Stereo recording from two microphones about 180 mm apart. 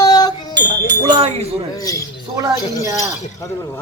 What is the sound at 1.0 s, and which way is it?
Speech, 30° right (ahead or behind).